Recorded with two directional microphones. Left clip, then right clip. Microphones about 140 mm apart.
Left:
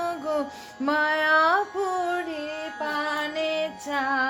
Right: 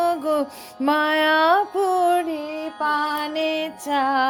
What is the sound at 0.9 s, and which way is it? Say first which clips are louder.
Female singing: right 3 dB; 60° right (ahead or behind).